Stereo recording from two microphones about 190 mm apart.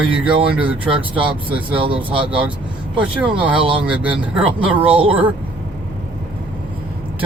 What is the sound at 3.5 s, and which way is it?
Speech, 25° right (ahead or behind).